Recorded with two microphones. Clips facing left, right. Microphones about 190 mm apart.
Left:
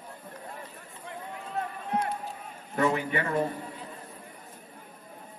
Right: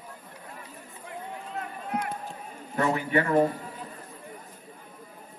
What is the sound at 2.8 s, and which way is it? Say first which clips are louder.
Speech: right 2 dB; 45° right (ahead or behind).